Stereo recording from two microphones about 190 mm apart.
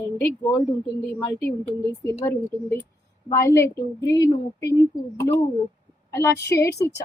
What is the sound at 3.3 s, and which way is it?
A woman's voice, 15° left (ahead or behind).